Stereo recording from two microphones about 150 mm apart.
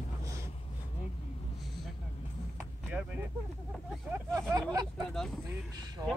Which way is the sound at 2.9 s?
5° right (ahead or behind).